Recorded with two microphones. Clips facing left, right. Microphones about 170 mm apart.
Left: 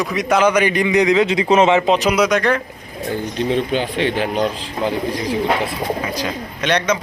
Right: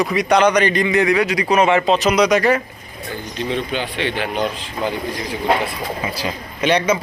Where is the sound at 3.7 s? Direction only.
40° left (ahead or behind).